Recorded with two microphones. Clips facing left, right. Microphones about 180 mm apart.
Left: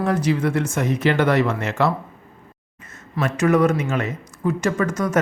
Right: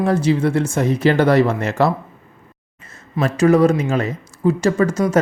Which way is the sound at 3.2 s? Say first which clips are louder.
Right 4 dB; 30° right (ahead or behind).